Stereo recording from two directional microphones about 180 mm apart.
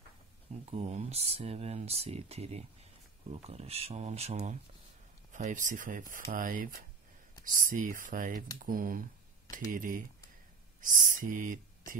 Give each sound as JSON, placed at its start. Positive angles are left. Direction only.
{"t": 0.7, "sound": "speech", "side_deg": -40}